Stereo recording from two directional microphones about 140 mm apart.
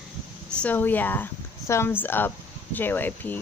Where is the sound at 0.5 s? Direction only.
10° left (ahead or behind).